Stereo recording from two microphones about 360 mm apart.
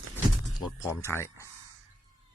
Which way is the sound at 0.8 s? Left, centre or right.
Centre.